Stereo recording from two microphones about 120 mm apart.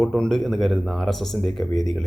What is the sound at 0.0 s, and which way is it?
Speech, 5° left (ahead or behind).